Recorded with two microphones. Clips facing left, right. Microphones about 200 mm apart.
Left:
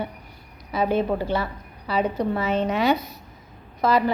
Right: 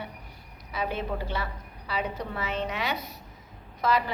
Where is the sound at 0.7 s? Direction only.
35° left (ahead or behind).